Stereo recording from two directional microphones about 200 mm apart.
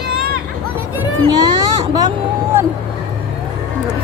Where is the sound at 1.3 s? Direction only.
20° right (ahead or behind).